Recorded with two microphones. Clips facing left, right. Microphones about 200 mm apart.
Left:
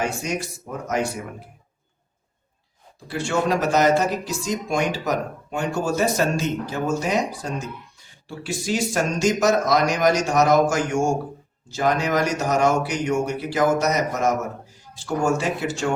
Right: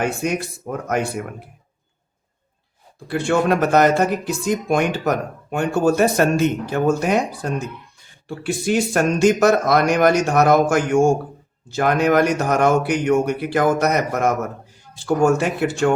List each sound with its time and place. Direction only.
0.0 s speech: 60° right (ahead or behind)
3.1 s speech: 55° right (ahead or behind)